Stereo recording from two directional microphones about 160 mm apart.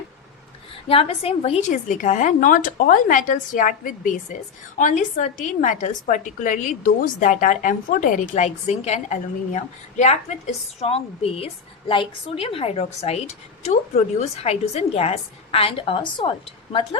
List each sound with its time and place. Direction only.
0.9 s a woman's voice: 35° left (ahead or behind)